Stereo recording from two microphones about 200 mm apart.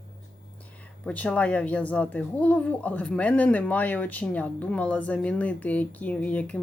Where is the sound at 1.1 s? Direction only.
5° left (ahead or behind).